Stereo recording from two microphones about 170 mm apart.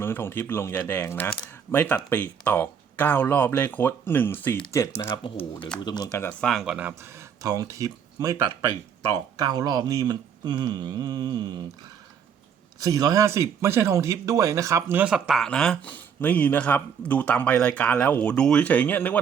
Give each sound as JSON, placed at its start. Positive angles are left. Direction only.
{"t": 0.0, "sound": "speech", "side_deg": 15}
{"t": 5.0, "sound": "speech", "side_deg": 30}
{"t": 6.1, "sound": "speech", "side_deg": 15}
{"t": 6.5, "sound": "speech", "side_deg": 0}
{"t": 7.4, "sound": "speech", "side_deg": -20}
{"t": 12.8, "sound": "speech", "side_deg": -20}